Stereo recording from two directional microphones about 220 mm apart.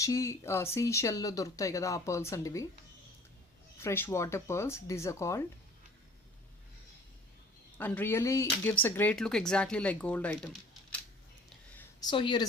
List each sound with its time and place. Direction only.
0.0 s speech: 15° left (ahead or behind)
3.8 s speech: 10° left (ahead or behind)
7.8 s speech: 10° left (ahead or behind)
11.9 s speech: 20° left (ahead or behind)